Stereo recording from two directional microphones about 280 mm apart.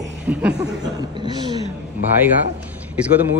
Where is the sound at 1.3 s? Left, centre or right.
Centre.